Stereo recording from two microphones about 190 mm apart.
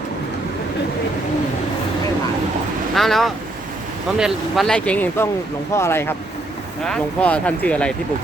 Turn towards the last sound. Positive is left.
turn(degrees=5)  # may be behind; listen again after turning